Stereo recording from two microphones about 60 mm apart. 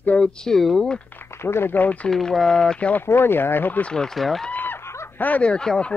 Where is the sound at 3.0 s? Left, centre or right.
Left.